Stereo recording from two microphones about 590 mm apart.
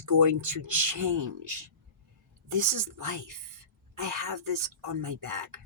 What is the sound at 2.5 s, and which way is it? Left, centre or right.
Speech, right.